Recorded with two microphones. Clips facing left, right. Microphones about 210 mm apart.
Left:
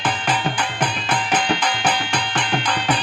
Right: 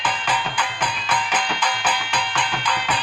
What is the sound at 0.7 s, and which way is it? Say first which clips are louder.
Music: left 3 dB; 25° left (ahead or behind).